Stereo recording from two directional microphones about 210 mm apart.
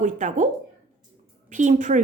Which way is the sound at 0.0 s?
35° right (ahead or behind).